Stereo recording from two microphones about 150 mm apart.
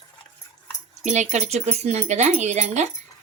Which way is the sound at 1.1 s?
50° right (ahead or behind).